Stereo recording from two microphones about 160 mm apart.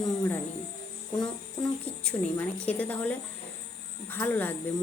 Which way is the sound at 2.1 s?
20° left (ahead or behind).